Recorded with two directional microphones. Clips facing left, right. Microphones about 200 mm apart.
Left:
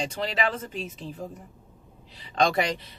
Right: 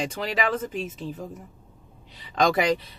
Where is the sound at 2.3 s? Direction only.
30° left (ahead or behind).